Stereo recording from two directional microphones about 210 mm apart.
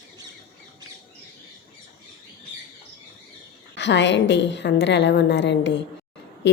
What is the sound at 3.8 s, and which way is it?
A woman's voice, 55° left (ahead or behind).